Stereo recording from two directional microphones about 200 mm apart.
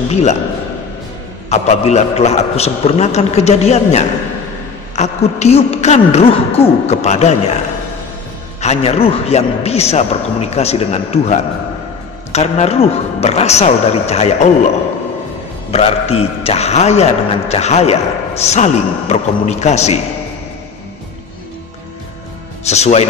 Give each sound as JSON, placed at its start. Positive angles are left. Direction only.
{"t": 0.1, "sound": "a man's voice", "side_deg": 35}
{"t": 1.5, "sound": "a man's voice", "side_deg": 35}
{"t": 8.5, "sound": "a man's voice", "side_deg": 30}
{"t": 15.7, "sound": "a man's voice", "side_deg": 30}
{"t": 22.7, "sound": "a man's voice", "side_deg": 35}